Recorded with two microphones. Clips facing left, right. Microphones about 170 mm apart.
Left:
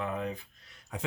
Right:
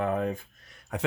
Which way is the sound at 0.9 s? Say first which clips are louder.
Right 7 dB; 65° right (ahead or behind).